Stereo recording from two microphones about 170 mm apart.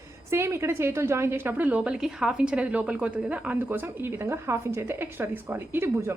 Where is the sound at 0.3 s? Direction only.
15° right (ahead or behind).